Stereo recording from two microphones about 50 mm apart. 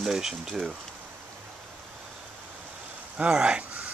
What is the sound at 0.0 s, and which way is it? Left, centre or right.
Speech, centre.